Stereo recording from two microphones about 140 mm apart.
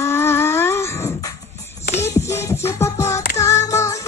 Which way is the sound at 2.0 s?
20° left (ahead or behind).